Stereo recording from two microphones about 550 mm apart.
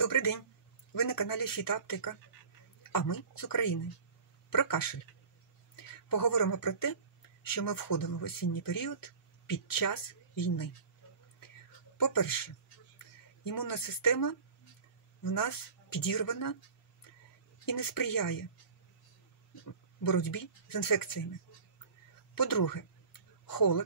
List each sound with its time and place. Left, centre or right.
0.0 s speech: left
12.0 s speech: left
17.6 s speech: left
20.0 s speech: left
22.3 s speech: left